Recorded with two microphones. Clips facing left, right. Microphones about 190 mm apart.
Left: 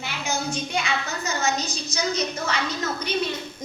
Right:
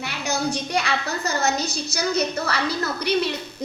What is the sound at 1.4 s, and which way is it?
A woman's voice, 65° right (ahead or behind).